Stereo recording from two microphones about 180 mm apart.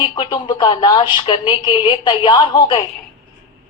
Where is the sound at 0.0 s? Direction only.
25° left (ahead or behind).